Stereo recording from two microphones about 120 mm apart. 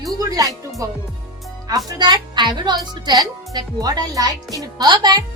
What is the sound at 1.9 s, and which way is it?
Speech, 35° right (ahead or behind).